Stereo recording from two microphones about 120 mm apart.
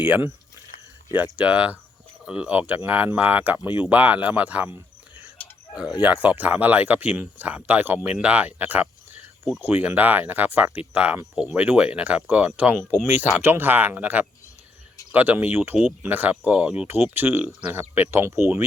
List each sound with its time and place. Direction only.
0.0 s speech: 15° right (ahead or behind)